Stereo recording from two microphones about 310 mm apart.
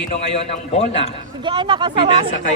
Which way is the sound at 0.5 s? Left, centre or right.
Left.